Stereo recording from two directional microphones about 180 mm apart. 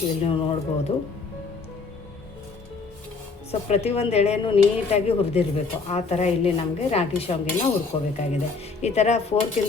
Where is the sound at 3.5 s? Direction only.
35° left (ahead or behind).